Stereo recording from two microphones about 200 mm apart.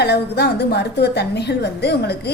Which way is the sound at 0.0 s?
55° left (ahead or behind).